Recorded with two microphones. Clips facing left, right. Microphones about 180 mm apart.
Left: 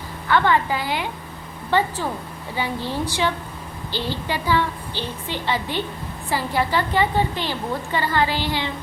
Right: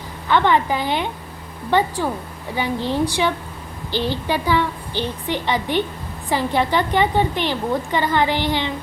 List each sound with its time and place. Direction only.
0.3 s a woman's voice: 20° right (ahead or behind)